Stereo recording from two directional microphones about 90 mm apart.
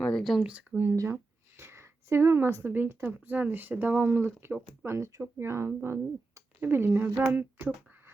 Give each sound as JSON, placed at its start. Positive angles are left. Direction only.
{"t": 0.0, "sound": "speech", "side_deg": 5}
{"t": 0.4, "sound": "speech", "side_deg": -15}
{"t": 1.0, "sound": "a woman's voice", "side_deg": -25}